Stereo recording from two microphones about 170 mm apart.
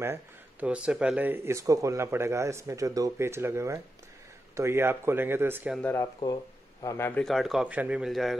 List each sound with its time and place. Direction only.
0.0 s speech: 10° right (ahead or behind)
5.8 s a man's voice: 10° left (ahead or behind)
7.2 s speech: centre (ahead or behind)